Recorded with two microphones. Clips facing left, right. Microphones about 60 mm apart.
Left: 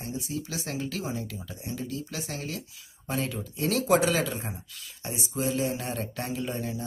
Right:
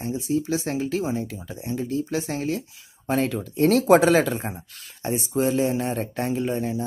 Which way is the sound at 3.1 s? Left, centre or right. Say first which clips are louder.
Right 8 dB; right.